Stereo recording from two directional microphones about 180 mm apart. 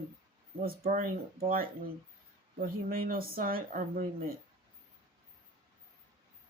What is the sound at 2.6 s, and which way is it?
Speech, 55° right (ahead or behind).